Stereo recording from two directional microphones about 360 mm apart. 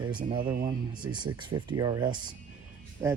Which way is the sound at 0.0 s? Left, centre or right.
Centre.